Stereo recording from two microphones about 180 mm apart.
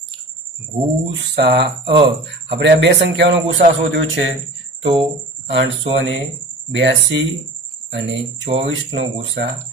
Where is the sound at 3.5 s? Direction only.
90° right.